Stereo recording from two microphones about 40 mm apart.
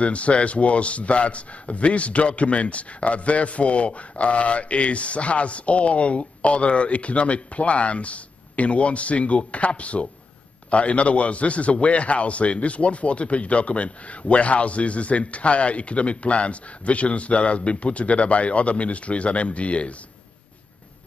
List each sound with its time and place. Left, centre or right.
0.0 s a man's voice: left